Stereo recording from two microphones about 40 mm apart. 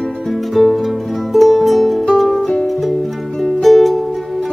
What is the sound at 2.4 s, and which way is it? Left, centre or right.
Music, centre.